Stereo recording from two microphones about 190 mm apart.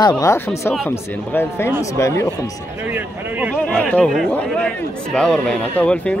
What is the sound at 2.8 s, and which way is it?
Speech, 10° right (ahead or behind).